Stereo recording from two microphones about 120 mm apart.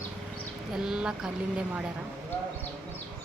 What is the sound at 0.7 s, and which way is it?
Speech, 5° right (ahead or behind).